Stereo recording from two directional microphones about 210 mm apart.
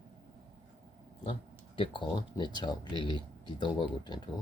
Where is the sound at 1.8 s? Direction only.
20° left (ahead or behind).